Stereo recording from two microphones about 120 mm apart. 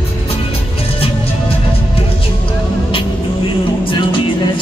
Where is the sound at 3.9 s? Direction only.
45° left (ahead or behind).